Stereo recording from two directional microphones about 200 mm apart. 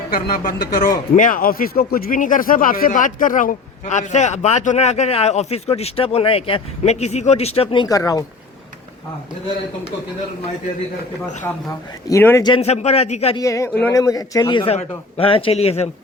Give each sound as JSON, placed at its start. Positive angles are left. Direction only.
{"t": 0.1, "sound": "a man's voice", "side_deg": 45}
{"t": 12.0, "sound": "a man's voice", "side_deg": 15}
{"t": 13.3, "sound": "a man's voice", "side_deg": 15}